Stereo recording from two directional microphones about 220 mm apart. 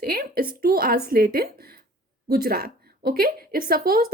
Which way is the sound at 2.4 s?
45° right (ahead or behind).